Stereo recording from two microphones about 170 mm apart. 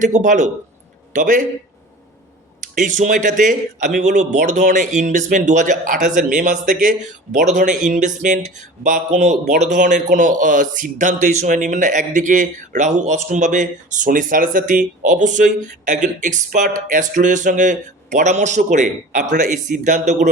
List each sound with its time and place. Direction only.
0.0 s a man's voice: 45° right (ahead or behind)
2.7 s a man's voice: 50° right (ahead or behind)